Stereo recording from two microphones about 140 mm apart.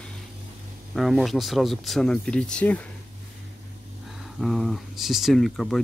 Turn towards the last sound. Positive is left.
turn(degrees=0)  # may be behind; listen again after turning